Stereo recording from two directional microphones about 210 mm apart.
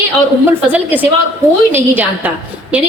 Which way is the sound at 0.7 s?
10° right (ahead or behind).